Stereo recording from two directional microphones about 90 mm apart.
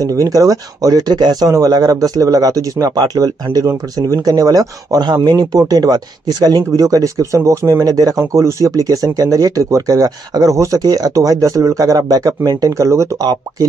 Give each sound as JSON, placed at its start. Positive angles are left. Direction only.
{"t": 0.0, "sound": "speech", "side_deg": -40}
{"t": 7.8, "sound": "speech", "side_deg": -45}
{"t": 13.2, "sound": "speech", "side_deg": -50}